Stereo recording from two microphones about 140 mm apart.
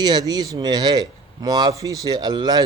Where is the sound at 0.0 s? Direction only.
30° right (ahead or behind).